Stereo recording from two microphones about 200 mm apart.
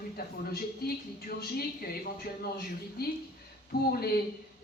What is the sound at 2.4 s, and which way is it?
A woman's voice, 50° left (ahead or behind).